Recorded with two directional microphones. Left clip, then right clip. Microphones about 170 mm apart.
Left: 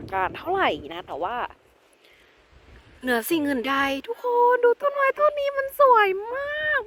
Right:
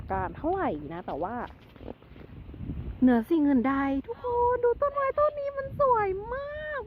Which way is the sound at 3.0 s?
5° left (ahead or behind).